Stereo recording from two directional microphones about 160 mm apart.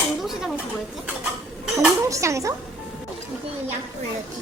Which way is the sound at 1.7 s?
20° right (ahead or behind).